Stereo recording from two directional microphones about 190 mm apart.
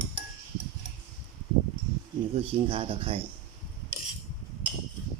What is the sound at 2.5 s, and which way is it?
Speech, 30° right (ahead or behind).